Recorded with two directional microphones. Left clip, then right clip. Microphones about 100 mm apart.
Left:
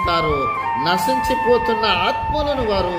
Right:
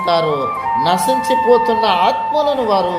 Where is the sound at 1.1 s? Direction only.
35° right (ahead or behind).